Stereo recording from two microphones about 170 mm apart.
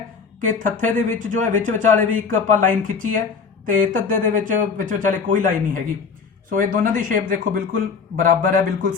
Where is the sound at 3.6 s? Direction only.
50° right (ahead or behind).